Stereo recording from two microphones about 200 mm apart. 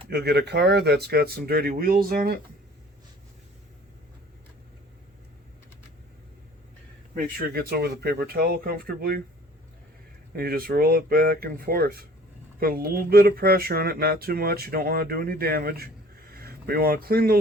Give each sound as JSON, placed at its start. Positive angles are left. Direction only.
{"t": 0.1, "sound": "speech", "side_deg": -55}
{"t": 7.1, "sound": "speech", "side_deg": -45}
{"t": 10.3, "sound": "speech", "side_deg": -50}